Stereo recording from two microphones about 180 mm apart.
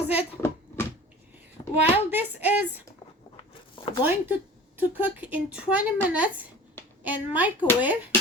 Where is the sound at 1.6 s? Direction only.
30° left (ahead or behind).